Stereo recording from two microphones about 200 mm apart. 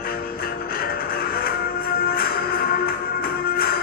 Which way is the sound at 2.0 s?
50° left (ahead or behind).